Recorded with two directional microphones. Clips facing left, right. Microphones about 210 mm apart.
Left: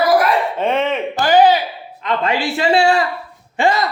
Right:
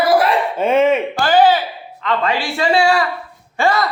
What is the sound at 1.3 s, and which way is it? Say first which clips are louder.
A man's voice: left 1 dB; 15° left (ahead or behind).